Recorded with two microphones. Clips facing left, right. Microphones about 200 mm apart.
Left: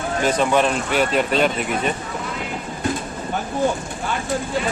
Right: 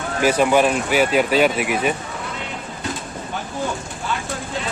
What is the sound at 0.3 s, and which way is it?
Speech, 10° right (ahead or behind).